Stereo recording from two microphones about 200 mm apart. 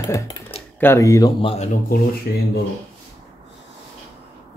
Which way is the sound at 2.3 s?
50° left (ahead or behind).